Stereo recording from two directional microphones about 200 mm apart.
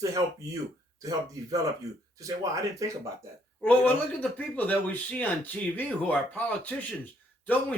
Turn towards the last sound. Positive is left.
turn(degrees=10)  # may be behind; listen again after turning